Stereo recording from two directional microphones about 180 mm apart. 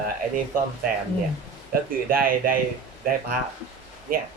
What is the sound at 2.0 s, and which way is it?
Speech, 50° right (ahead or behind).